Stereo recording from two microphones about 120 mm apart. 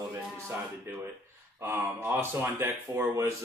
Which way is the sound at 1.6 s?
20° right (ahead or behind).